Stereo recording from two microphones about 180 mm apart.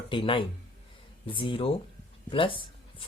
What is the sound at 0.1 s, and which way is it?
Speech, 30° left (ahead or behind).